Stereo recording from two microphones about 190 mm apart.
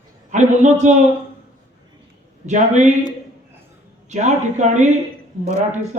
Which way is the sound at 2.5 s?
40° right (ahead or behind).